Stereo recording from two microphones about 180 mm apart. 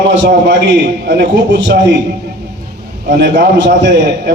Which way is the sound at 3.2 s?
80° right.